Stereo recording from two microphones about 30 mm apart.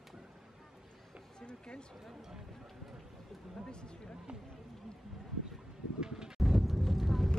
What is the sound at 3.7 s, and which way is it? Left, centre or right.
Speech, left.